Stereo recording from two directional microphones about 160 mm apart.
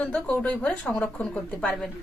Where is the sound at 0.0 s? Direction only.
10° left (ahead or behind).